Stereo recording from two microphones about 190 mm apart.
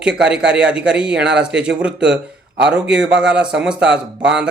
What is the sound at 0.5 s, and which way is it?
Speech, 5° right (ahead or behind).